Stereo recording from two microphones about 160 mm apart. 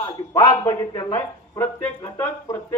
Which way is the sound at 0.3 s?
20° left (ahead or behind).